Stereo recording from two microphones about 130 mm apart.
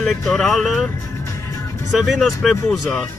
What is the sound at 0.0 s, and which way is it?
Speech, 5° left (ahead or behind).